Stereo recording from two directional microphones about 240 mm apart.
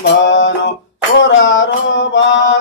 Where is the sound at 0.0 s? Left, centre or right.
Left.